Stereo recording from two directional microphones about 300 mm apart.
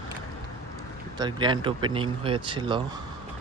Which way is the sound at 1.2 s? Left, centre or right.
Centre.